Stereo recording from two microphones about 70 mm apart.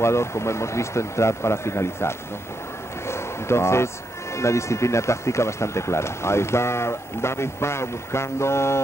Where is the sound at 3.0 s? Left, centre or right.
Left.